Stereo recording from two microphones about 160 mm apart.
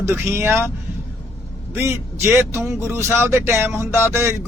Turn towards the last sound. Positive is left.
turn(degrees=-15)  # may be behind; listen again after turning